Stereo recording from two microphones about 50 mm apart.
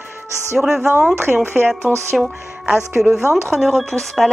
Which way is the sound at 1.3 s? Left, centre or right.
Centre.